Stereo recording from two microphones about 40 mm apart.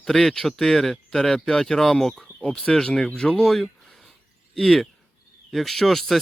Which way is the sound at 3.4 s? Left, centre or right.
Centre.